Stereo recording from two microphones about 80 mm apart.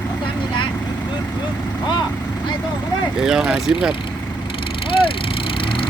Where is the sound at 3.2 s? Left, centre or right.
Centre.